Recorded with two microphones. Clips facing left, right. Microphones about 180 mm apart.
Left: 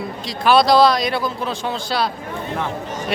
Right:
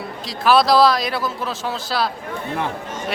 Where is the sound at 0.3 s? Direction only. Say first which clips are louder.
Left 1 dB; centre (ahead or behind).